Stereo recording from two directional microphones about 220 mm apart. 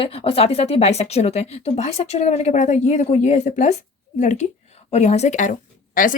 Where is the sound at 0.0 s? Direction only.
25° left (ahead or behind).